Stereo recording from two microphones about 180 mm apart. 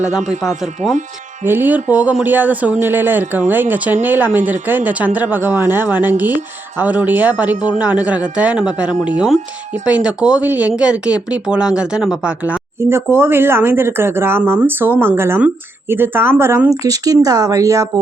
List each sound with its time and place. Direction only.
0.3 s speech: 5° right (ahead or behind); by 18.0 s 20° right (ahead or behind)